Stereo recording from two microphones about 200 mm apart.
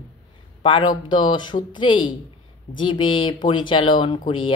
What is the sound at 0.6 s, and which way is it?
A man's voice, 25° left (ahead or behind).